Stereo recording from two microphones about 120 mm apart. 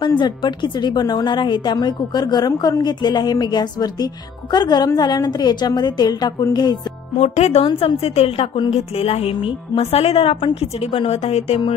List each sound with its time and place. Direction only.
0.0 s speech: 40° left (ahead or behind)
7.2 s a woman's voice: 65° left (ahead or behind)
7.6 s a woman's voice: 55° left (ahead or behind)